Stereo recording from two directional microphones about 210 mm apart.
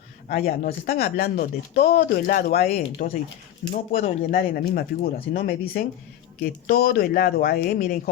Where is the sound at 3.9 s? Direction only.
30° left (ahead or behind).